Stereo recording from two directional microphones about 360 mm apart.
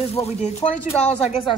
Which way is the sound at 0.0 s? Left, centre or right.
Centre.